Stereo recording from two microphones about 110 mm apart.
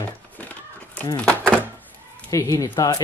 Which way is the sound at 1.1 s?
10° left (ahead or behind).